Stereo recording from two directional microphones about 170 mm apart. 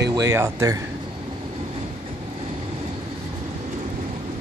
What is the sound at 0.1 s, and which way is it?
Speech, 20° right (ahead or behind).